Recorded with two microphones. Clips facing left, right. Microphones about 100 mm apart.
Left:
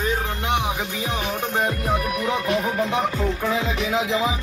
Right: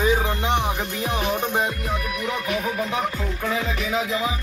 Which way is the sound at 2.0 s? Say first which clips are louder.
Left 3 dB; 40° left (ahead or behind).